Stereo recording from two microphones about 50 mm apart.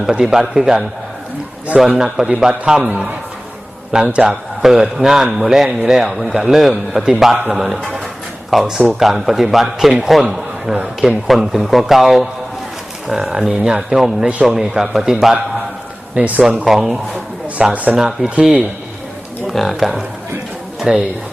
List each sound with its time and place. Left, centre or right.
0.0 s a man's voice: centre
1.9 s a man's voice: centre
3.9 s a man's voice: centre
16.1 s speech: right
16.6 s a man's voice: centre
19.5 s speech: centre
20.7 s a sound: centre